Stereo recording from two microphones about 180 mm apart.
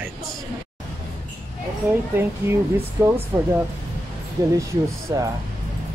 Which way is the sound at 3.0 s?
15° right (ahead or behind).